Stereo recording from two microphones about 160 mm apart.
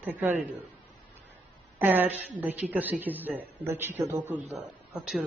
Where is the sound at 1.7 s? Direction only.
10° right (ahead or behind).